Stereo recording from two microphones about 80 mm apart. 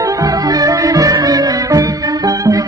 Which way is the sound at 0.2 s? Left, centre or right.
Right.